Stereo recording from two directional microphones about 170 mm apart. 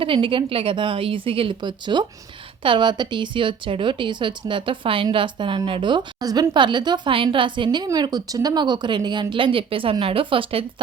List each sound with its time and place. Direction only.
0.0 s a woman's voice: 30° right (ahead or behind)